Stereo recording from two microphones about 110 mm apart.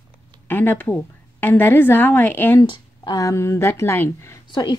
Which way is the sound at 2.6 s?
40° left (ahead or behind).